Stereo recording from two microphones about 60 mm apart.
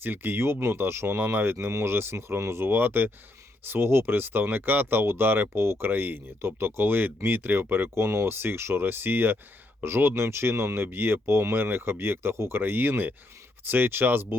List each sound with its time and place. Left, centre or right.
0.0 s speech: right
1.5 s speech: right
5.9 s speech: right